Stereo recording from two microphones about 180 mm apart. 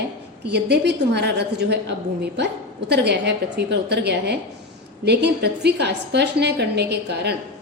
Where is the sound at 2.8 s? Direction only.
70° right (ahead or behind).